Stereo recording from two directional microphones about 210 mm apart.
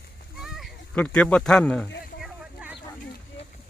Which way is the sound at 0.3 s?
Centre (ahead or behind).